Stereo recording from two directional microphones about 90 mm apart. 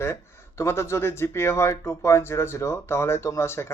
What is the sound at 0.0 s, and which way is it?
Speech, 30° left (ahead or behind).